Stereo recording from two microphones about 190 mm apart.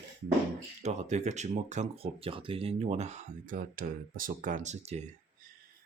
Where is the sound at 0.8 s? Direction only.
35° right (ahead or behind).